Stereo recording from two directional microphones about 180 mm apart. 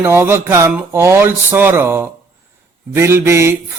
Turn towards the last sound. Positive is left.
turn(degrees=-15)  # may be behind; listen again after turning